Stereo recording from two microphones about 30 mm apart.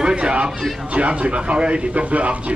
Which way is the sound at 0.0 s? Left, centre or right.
Right.